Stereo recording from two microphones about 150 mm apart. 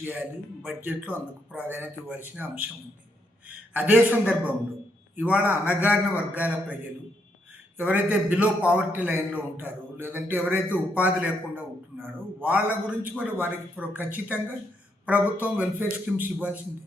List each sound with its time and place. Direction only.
0.0 s a man's voice: 10° right (ahead or behind)
3.8 s a man's voice: 10° right (ahead or behind)
7.8 s a man's voice: 10° right (ahead or behind)